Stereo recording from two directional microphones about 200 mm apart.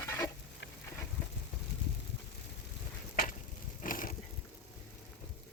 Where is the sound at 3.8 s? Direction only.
45° left (ahead or behind).